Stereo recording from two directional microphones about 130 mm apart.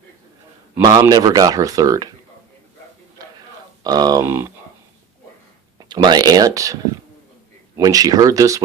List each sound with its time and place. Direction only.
0.8 s speech: 30° right (ahead or behind)
3.8 s speech: 30° right (ahead or behind)
4.3 s speech: 20° right (ahead or behind)
5.9 s speech: 35° right (ahead or behind)
7.8 s speech: 30° right (ahead or behind)